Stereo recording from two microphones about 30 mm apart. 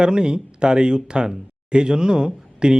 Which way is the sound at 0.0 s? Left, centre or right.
Right.